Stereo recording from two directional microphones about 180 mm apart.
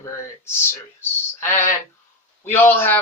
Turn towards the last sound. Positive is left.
turn(degrees=10)  # may be behind; listen again after turning